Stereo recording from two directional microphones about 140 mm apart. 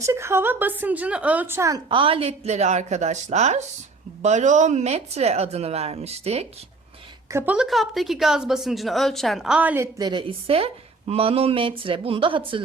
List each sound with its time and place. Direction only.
0.0 s a woman's voice: 20° right (ahead or behind)
1.9 s speech: 40° right (ahead or behind)
7.3 s a woman's voice: 20° right (ahead or behind)
7.5 s a woman's voice: 5° right (ahead or behind)
10.0 s speech: 35° right (ahead or behind)